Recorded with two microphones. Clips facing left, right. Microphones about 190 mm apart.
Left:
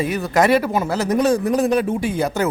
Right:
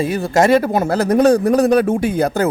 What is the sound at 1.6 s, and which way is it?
Speech, 40° right (ahead or behind).